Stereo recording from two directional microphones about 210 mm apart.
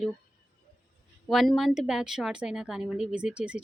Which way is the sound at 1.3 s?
Centre (ahead or behind).